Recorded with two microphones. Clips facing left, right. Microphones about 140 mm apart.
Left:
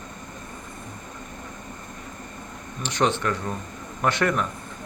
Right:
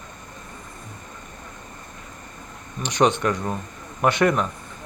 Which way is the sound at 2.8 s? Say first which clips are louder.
Right 4 dB; 15° right (ahead or behind).